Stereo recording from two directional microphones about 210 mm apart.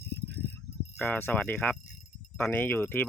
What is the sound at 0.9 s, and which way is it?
Speech, 10° left (ahead or behind).